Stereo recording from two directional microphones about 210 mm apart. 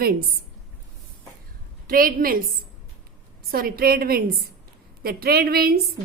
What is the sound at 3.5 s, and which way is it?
A woman's voice, 45° right (ahead or behind).